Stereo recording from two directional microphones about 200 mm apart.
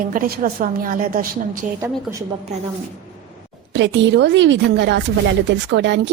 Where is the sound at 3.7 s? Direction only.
65° right (ahead or behind).